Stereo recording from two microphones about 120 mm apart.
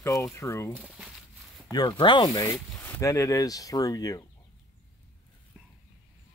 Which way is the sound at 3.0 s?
25° left (ahead or behind).